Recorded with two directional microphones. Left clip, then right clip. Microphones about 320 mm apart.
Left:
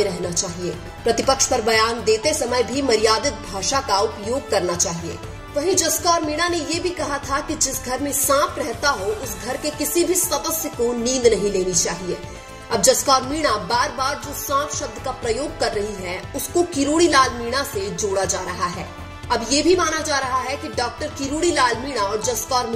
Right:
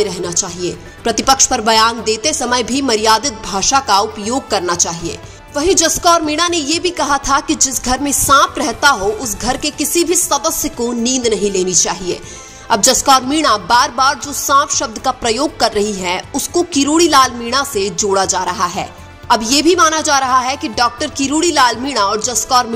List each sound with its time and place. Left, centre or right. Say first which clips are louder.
0.0 s a woman's voice: right 5 dB; right